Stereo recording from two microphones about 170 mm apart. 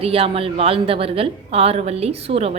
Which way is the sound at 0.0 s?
35° right (ahead or behind).